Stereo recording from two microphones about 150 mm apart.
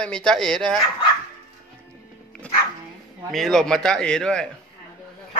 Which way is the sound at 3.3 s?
Centre (ahead or behind).